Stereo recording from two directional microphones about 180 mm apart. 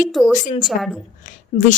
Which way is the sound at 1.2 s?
45° left (ahead or behind).